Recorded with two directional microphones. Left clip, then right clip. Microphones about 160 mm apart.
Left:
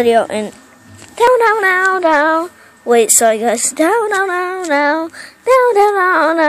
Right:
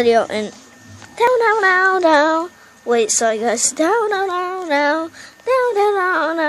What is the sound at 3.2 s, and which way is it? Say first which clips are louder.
Speech: left 5 dB; 5° left (ahead or behind).